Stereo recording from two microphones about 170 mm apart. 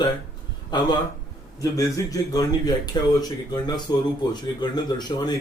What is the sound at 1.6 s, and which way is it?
A man's voice, 20° left (ahead or behind).